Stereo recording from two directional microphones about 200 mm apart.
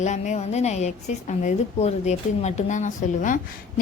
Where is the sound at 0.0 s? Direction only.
35° left (ahead or behind).